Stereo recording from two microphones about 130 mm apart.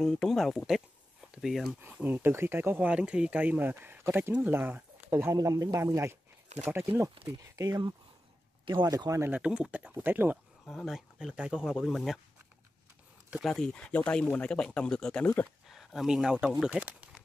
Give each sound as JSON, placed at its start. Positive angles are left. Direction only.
{"t": 0.0, "sound": "speech", "side_deg": 5}
{"t": 1.8, "sound": "speech", "side_deg": -15}
{"t": 7.2, "sound": "speech", "side_deg": -30}
{"t": 9.3, "sound": "speech", "side_deg": -10}
{"t": 10.6, "sound": "speech", "side_deg": 5}
{"t": 13.3, "sound": "speech", "side_deg": 0}